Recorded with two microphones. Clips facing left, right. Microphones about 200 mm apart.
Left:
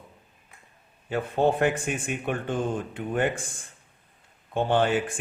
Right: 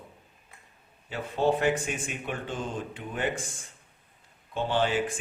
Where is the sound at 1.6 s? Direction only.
55° left (ahead or behind).